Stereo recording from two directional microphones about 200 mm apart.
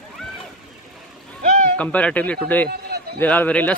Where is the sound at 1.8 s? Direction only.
5° left (ahead or behind).